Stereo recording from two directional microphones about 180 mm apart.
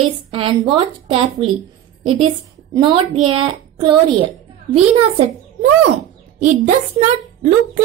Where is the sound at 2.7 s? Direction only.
25° right (ahead or behind).